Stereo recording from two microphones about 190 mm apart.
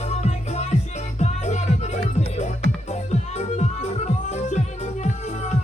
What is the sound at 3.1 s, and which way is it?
Music, 35° left (ahead or behind).